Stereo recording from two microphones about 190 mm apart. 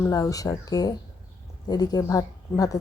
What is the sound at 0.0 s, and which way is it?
A woman's voice, 15° left (ahead or behind).